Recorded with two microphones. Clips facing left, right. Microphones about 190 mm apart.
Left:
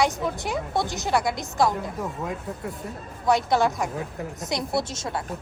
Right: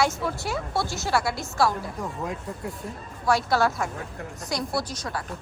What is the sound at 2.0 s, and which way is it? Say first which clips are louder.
Speech: left 1 dB; centre (ahead or behind).